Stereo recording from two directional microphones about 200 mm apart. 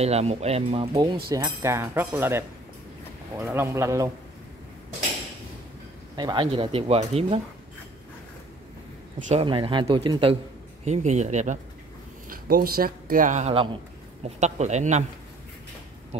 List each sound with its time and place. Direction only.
0.0 s a man's voice: 30° right (ahead or behind); by 4.1 s 15° right (ahead or behind)
6.1 s speech: 20° right (ahead or behind)
9.3 s speech: 25° right (ahead or behind)
10.9 s speech: 35° right (ahead or behind)